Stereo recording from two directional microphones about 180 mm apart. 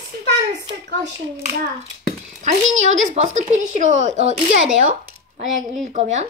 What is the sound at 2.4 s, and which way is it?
Speech, 40° right (ahead or behind).